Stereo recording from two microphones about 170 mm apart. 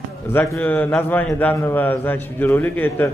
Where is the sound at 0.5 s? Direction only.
10° left (ahead or behind).